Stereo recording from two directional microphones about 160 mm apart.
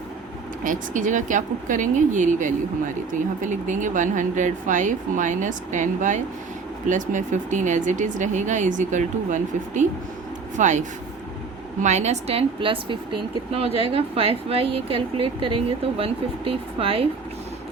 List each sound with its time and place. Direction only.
0.6 s a woman's voice: 55° right (ahead or behind); by 17.1 s 35° right (ahead or behind)